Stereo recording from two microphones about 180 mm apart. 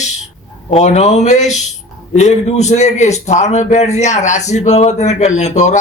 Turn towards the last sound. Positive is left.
turn(degrees=40)  # may be behind; listen again after turning